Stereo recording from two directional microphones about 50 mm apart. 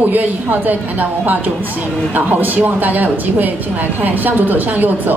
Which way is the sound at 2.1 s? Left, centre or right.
Right.